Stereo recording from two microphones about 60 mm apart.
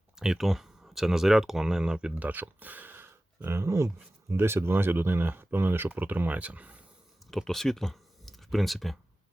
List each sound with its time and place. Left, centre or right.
0.2 s speech: centre
2.1 s speech: right
7.3 s speech: centre